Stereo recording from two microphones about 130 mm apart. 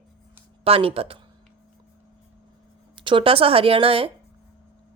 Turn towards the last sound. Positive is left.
turn(degrees=-45)  # may be behind; listen again after turning